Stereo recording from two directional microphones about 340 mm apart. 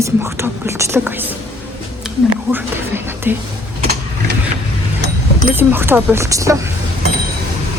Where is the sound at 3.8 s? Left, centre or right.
Right.